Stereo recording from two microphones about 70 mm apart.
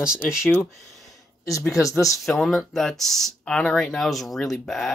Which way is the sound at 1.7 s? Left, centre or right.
Left.